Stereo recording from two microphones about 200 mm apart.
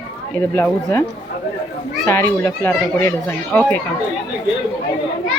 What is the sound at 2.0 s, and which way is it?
Speech, 10° left (ahead or behind).